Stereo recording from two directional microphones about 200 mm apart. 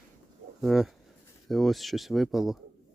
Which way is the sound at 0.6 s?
Centre (ahead or behind).